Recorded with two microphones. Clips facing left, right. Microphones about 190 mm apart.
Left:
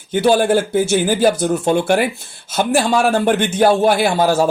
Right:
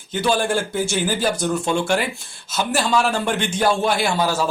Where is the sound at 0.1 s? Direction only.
50° left (ahead or behind).